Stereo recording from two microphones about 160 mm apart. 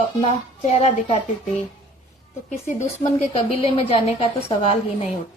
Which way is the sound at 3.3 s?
40° left (ahead or behind).